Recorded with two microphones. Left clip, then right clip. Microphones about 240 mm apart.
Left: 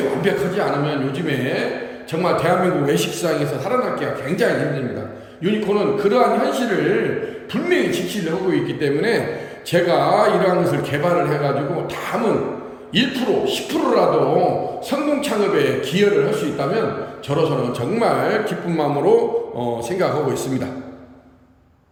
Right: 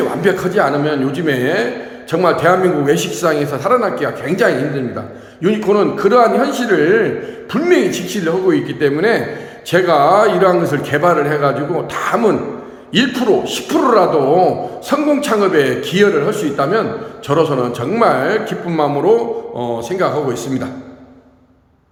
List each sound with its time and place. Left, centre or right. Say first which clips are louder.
0.2 s a man's voice: right 6 dB; centre